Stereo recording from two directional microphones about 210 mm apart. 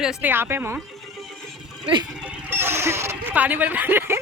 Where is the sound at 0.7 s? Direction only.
Centre (ahead or behind).